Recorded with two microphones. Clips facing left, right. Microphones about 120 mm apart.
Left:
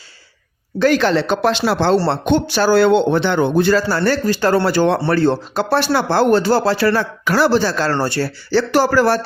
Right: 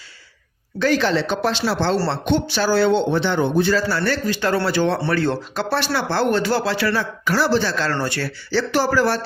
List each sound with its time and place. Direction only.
0.8 s speech: 55° left (ahead or behind)
2.0 s speech: 50° left (ahead or behind)
7.3 s speech: 60° left (ahead or behind)
7.6 s speech: 40° left (ahead or behind)
8.4 s speech: 50° left (ahead or behind)